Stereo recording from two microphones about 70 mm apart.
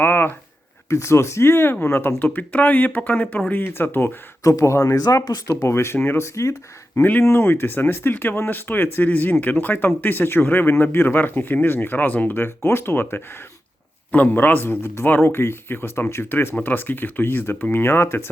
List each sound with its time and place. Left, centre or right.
0.0 s a sound: left
0.9 s speech: left
3.5 s a man's voice: left
4.4 s speech: left
4.9 s a man's voice: left
7.1 s a man's voice: left